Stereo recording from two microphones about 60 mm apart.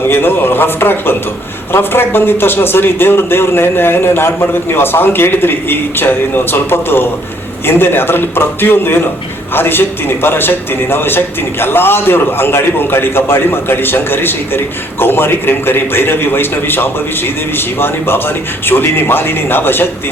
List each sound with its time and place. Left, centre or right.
0.1 s a man's voice: left